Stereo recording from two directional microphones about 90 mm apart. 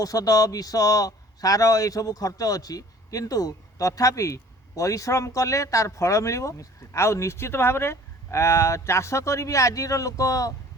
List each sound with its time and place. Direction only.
0.0 s speech: 40° left (ahead or behind)